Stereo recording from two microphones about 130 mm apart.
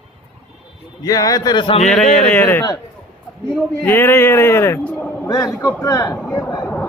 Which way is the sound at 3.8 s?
15° left (ahead or behind).